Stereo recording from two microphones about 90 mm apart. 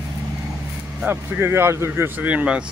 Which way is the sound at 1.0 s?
25° right (ahead or behind).